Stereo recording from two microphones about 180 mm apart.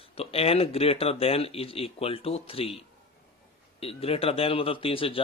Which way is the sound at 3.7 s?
35° left (ahead or behind).